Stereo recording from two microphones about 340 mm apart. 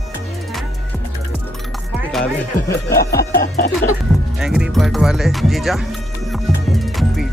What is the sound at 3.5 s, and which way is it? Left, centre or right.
Music, left.